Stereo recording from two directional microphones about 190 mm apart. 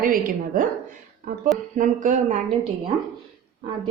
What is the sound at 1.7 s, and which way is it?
Speech, 40° right (ahead or behind).